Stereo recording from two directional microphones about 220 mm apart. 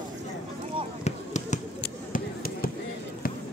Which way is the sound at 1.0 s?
30° left (ahead or behind).